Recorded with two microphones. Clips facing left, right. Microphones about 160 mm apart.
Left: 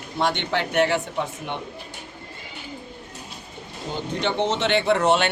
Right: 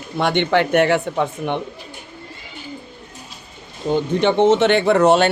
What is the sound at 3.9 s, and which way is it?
Speech, 55° right (ahead or behind).